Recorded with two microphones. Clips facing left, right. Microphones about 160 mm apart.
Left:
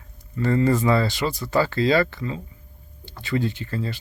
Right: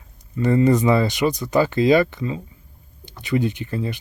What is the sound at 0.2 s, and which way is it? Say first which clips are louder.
Speech: right 3 dB; 20° right (ahead or behind).